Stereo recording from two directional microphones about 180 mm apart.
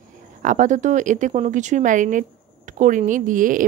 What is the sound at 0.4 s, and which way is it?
Speech, 45° right (ahead or behind).